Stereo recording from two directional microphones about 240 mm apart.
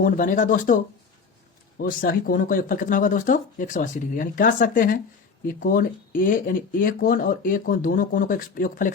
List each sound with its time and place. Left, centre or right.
0.0 s speech: left
1.8 s speech: left